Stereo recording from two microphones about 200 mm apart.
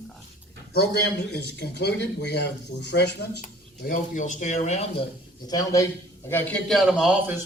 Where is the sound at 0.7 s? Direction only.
50° left (ahead or behind).